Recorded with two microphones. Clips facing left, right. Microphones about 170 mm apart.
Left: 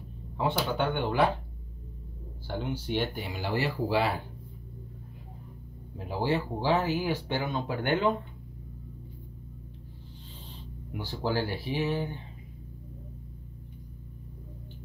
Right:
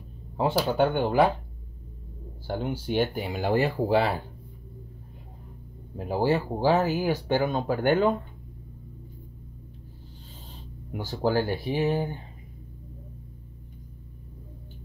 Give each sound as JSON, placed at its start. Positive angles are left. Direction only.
{"t": 0.4, "sound": "speech", "side_deg": -40}
{"t": 2.4, "sound": "speech", "side_deg": -45}
{"t": 5.9, "sound": "speech", "side_deg": -45}
{"t": 10.5, "sound": "speech", "side_deg": -45}